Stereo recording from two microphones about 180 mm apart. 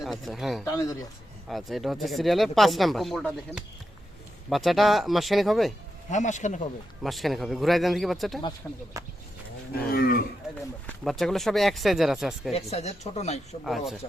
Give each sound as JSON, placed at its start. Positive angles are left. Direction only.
{"t": 0.0, "sound": "speech", "side_deg": 0}
{"t": 0.6, "sound": "speech", "side_deg": 15}
{"t": 1.5, "sound": "speech", "side_deg": 0}
{"t": 6.1, "sound": "speech", "side_deg": 40}
{"t": 7.0, "sound": "speech", "side_deg": 0}
{"t": 9.7, "sound": "cattle", "side_deg": 55}
{"t": 10.8, "sound": "speech", "side_deg": 0}
{"t": 12.7, "sound": "speech", "side_deg": 35}
{"t": 13.7, "sound": "speech", "side_deg": 0}